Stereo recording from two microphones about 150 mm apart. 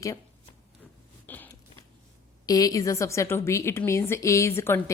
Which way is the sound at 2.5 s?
25° left (ahead or behind).